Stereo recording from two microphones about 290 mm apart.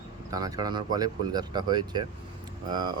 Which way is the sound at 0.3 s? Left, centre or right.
Centre.